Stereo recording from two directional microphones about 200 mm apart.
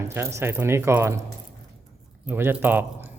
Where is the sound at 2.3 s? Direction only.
10° right (ahead or behind).